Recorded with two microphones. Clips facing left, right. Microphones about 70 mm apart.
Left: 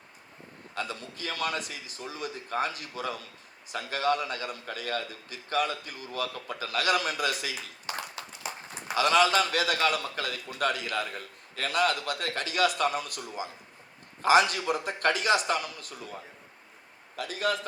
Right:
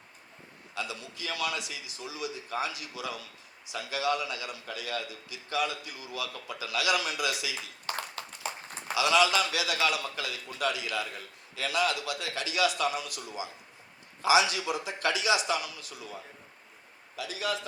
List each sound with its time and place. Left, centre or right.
0.8 s a man's voice: left
9.0 s a man's voice: left
17.2 s a man's voice: left